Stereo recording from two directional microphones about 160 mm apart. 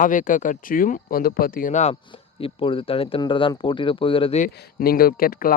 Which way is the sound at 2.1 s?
35° left (ahead or behind).